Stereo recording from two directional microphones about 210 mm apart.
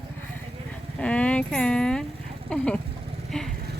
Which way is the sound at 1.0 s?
5° left (ahead or behind).